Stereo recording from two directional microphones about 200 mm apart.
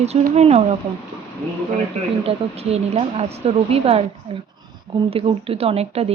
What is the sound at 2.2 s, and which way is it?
Speech, 30° right (ahead or behind).